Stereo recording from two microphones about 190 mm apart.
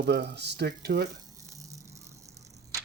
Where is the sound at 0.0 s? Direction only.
60° right (ahead or behind).